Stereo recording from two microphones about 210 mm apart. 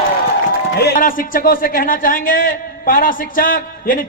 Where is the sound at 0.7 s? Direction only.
50° left (ahead or behind).